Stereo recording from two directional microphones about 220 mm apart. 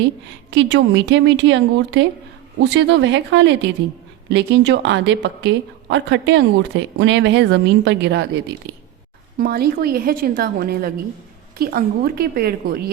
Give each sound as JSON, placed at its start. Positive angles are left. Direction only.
{"t": 0.5, "sound": "speech", "side_deg": -55}